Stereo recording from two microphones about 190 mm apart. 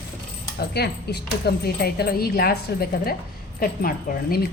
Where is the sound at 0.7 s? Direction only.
60° left (ahead or behind).